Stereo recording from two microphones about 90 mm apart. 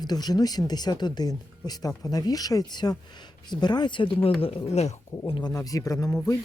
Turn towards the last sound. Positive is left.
turn(degrees=35)  # may be behind; listen again after turning